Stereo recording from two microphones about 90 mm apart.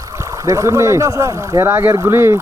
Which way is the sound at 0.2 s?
35° right (ahead or behind).